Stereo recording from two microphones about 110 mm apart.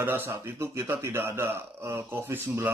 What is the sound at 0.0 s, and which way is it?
Speech, 20° right (ahead or behind).